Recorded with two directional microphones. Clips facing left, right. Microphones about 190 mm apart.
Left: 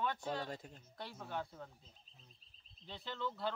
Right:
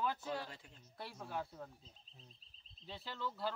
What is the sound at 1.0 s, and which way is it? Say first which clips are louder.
Speech: even; 5° right (ahead or behind).